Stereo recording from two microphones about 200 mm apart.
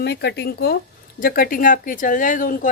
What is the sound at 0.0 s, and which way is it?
Speech, 55° left (ahead or behind).